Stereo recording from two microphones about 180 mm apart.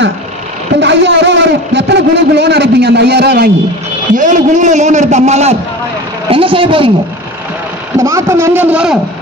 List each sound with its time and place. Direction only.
0.7 s a man's voice: 80° right
4.2 s a man's voice: 45° right (ahead or behind)
8.0 s a man's voice: 15° right (ahead or behind)